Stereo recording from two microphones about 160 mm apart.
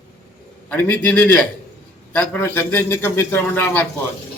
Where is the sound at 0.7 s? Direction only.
10° left (ahead or behind).